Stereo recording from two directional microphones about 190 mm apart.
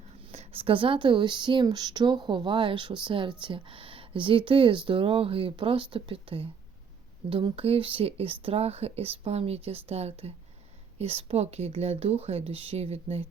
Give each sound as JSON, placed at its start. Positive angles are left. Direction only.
{"t": 0.3, "sound": "speech", "side_deg": -30}